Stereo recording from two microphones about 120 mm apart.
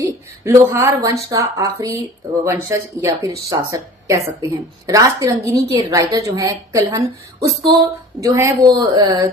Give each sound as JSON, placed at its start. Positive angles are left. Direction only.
{"t": 0.4, "sound": "a woman's voice", "side_deg": -25}
{"t": 8.2, "sound": "a woman's voice", "side_deg": -25}